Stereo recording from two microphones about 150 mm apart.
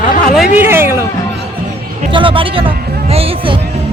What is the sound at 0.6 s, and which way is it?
Speech, 15° right (ahead or behind).